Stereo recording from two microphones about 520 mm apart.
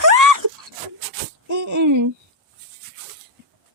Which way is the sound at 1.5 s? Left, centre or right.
Right.